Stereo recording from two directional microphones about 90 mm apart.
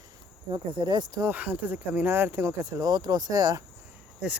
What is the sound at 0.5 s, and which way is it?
Speech, 55° right (ahead or behind).